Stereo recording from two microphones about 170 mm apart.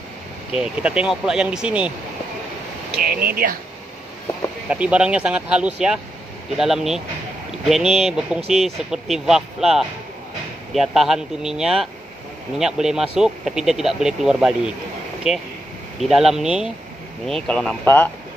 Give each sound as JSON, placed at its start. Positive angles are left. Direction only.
{"t": 0.6, "sound": "speech", "side_deg": -5}
{"t": 3.0, "sound": "speech", "side_deg": -60}
{"t": 4.6, "sound": "speech", "side_deg": -5}